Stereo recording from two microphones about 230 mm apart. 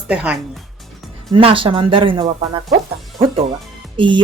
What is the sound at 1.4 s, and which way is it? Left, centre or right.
Speech, right.